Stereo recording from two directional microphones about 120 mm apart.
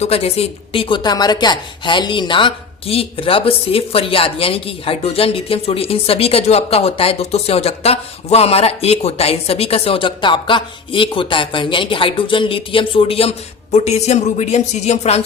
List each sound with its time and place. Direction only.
0.0 s a woman's voice: 60° left (ahead or behind)